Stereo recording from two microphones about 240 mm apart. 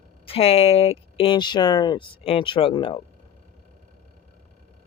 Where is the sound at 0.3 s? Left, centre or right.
Left.